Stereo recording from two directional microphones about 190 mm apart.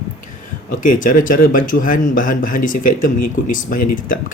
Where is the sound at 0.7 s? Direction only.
45° left (ahead or behind).